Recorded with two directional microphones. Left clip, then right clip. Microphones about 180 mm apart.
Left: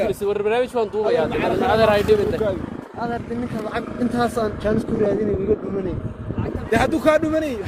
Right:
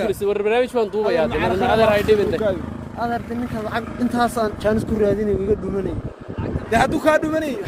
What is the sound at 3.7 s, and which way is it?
Speech, 50° right (ahead or behind).